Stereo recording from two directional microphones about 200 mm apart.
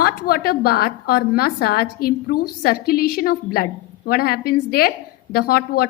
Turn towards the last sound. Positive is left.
turn(degrees=50)  # may be behind; listen again after turning